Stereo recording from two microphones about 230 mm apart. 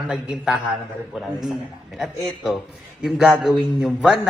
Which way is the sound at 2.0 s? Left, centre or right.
Centre.